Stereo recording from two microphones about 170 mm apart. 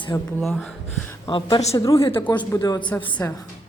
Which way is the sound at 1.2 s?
30° left (ahead or behind).